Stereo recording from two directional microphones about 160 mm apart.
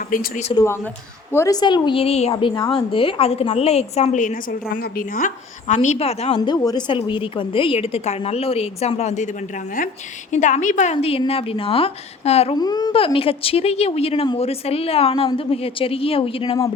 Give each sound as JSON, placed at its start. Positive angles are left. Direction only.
{"t": 0.1, "sound": "speech", "side_deg": 60}
{"t": 0.5, "sound": "a woman's voice", "side_deg": 20}
{"t": 2.3, "sound": "a woman's voice", "side_deg": 30}
{"t": 6.4, "sound": "a woman's voice", "side_deg": 25}
{"t": 10.3, "sound": "a woman's voice", "side_deg": 50}
{"t": 10.9, "sound": "a woman's voice", "side_deg": 35}
{"t": 12.5, "sound": "a woman's voice", "side_deg": 25}
{"t": 13.1, "sound": "a woman's voice", "side_deg": 35}